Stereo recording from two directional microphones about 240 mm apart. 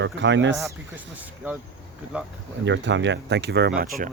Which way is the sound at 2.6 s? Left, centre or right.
Right.